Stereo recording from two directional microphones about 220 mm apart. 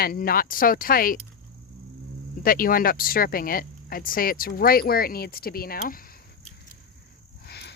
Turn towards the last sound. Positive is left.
turn(degrees=50)  # may be behind; listen again after turning